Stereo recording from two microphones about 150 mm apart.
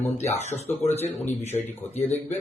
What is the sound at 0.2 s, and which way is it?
Speech, 45° left (ahead or behind).